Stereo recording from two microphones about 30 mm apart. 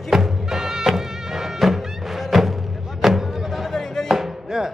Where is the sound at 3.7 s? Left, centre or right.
Centre.